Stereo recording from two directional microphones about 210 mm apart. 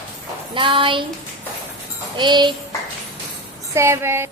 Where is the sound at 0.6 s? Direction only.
25° right (ahead or behind).